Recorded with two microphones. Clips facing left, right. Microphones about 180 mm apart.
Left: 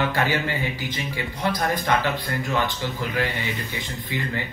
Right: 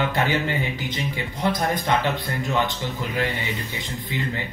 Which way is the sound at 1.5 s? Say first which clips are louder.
Right 1 dB; 20° right (ahead or behind).